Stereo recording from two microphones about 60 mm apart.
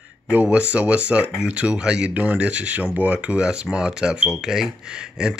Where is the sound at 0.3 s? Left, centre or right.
Right.